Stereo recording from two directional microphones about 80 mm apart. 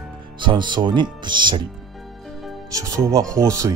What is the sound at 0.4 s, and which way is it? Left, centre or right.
Speech, right.